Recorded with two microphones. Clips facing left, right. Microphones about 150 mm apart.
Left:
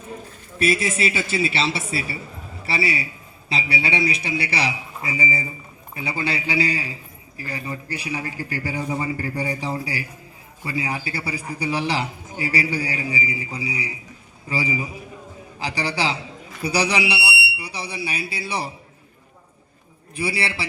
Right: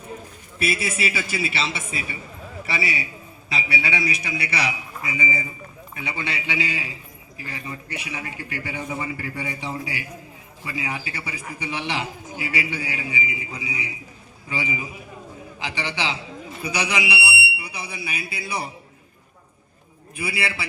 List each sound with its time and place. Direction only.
0.8 s a man's voice: 10° right (ahead or behind)
1.0 s a man's voice: 35° left (ahead or behind)
20.1 s a man's voice: 35° left (ahead or behind)